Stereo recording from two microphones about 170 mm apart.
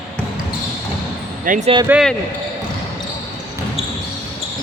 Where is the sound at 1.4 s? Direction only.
50° right (ahead or behind).